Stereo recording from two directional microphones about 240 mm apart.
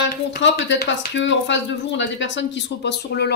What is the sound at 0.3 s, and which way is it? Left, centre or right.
Speech, left.